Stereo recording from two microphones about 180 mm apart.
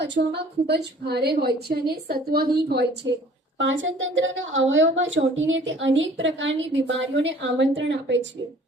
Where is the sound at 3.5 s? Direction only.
90° right.